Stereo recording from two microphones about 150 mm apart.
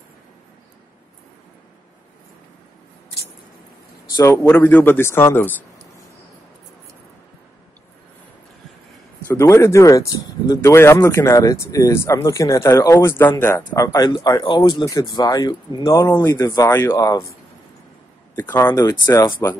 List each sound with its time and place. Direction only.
4.2 s a man's voice: 20° left (ahead or behind)
9.3 s speech: 20° left (ahead or behind)